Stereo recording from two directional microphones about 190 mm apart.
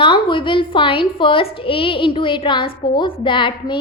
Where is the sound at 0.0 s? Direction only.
25° left (ahead or behind).